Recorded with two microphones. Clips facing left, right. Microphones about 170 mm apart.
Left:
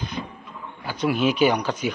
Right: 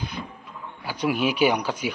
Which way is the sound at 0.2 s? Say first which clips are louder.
Left 3 dB; 15° left (ahead or behind).